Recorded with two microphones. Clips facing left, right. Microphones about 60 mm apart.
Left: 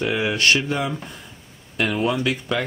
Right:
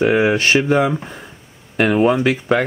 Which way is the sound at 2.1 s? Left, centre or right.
Right.